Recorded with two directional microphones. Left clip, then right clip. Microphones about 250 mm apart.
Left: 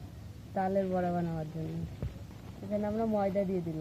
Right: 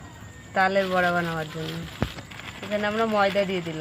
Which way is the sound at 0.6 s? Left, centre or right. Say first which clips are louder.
Right 10 dB; centre.